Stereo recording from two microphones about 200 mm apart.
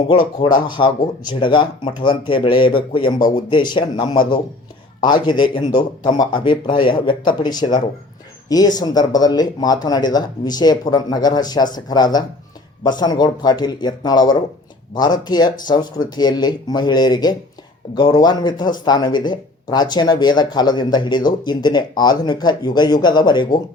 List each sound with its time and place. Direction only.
0.4 s speech: 20° left (ahead or behind)